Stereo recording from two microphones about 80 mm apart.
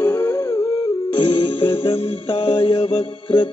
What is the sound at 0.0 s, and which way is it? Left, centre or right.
Music, left.